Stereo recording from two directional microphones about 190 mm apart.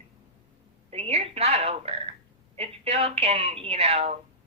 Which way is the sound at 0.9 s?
30° right (ahead or behind).